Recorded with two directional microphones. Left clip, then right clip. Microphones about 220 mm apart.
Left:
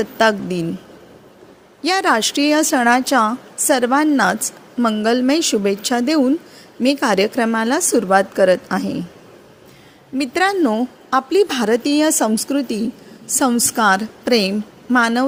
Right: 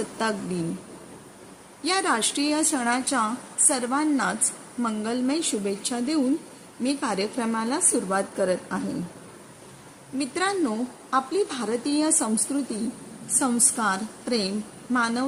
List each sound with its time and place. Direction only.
0.2 s a woman's voice: 30° left (ahead or behind)
1.8 s a woman's voice: 30° left (ahead or behind)
10.2 s a woman's voice: 30° left (ahead or behind)